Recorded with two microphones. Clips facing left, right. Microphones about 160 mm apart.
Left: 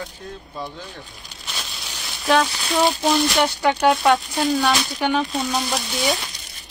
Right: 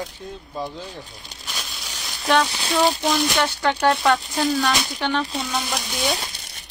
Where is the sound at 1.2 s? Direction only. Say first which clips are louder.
Right 1 dB; 30° right (ahead or behind).